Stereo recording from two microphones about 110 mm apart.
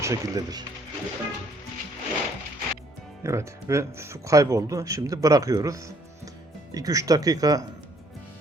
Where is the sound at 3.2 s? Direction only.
25° right (ahead or behind).